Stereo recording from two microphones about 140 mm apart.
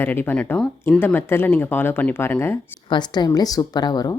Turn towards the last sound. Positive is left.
turn(degrees=30)  # may be behind; listen again after turning